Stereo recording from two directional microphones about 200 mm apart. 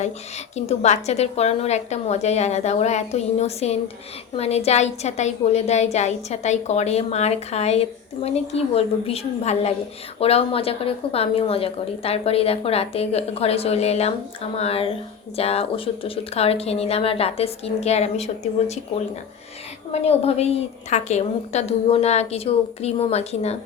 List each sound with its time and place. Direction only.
0.5 s a woman's voice: 35° left (ahead or behind)
19.9 s a woman's voice: 30° left (ahead or behind)